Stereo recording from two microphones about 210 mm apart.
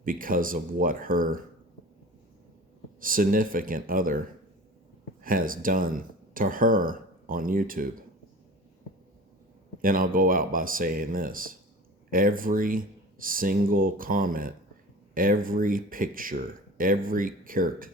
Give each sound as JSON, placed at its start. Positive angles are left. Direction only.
{"t": 0.0, "sound": "speech", "side_deg": -40}
{"t": 3.0, "sound": "speech", "side_deg": -40}
{"t": 5.2, "sound": "speech", "side_deg": -40}
{"t": 9.8, "sound": "speech", "side_deg": -40}